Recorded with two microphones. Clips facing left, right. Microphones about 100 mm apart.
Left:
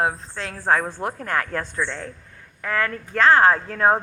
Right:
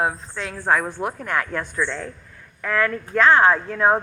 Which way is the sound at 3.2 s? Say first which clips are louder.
Even; 35° left (ahead or behind).